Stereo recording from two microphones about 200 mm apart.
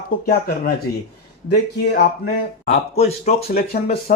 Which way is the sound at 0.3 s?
50° left (ahead or behind).